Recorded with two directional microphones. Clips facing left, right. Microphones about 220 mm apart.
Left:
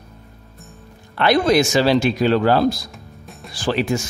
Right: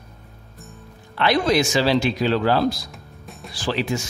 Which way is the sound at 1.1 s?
50° left (ahead or behind).